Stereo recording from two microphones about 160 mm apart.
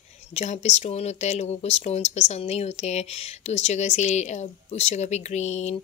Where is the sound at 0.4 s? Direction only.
45° left (ahead or behind).